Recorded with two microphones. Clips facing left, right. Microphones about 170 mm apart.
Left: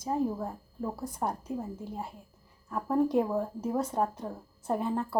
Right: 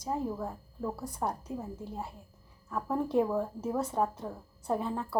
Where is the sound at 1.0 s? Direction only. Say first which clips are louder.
Left 2 dB; centre (ahead or behind).